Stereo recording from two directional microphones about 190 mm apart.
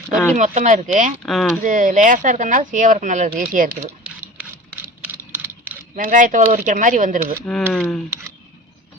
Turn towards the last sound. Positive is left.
turn(degrees=5)  # may be behind; listen again after turning